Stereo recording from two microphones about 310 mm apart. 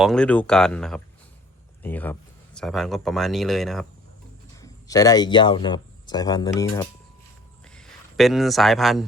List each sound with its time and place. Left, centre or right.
0.0 s speech: centre
4.5 s speech: centre
7.6 s a sound: centre